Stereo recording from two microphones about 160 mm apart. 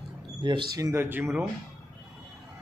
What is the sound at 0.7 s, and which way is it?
Speech, 20° right (ahead or behind).